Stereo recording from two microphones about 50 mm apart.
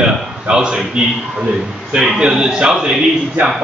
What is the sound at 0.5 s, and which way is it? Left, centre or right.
Speech, centre.